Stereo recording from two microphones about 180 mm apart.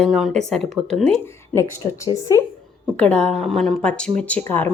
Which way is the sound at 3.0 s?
5° left (ahead or behind).